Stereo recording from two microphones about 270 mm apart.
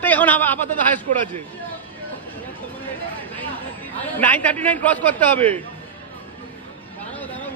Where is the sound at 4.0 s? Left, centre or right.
Centre.